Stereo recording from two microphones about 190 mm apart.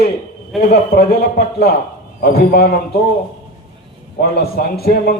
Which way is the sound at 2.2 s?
55° left (ahead or behind).